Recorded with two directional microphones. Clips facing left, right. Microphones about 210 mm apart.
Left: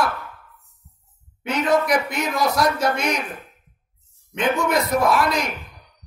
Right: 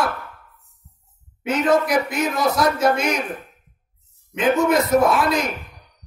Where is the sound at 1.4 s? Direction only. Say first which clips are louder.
Right 2 dB; 5° right (ahead or behind).